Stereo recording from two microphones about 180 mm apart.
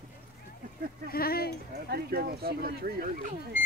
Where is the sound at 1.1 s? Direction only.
55° left (ahead or behind).